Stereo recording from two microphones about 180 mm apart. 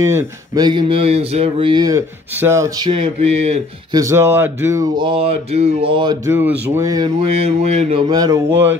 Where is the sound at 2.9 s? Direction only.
35° right (ahead or behind).